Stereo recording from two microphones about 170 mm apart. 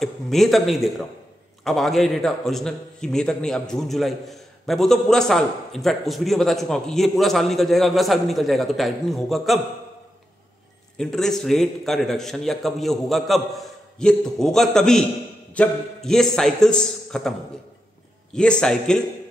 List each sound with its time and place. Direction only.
0.0 s a man's voice: centre (ahead or behind)
11.0 s a man's voice: 5° left (ahead or behind)
18.3 s a man's voice: 5° left (ahead or behind)